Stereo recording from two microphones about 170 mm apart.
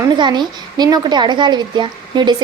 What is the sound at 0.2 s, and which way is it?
Speech, 25° right (ahead or behind).